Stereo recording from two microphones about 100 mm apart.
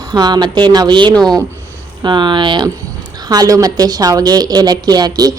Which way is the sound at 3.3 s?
35° right (ahead or behind).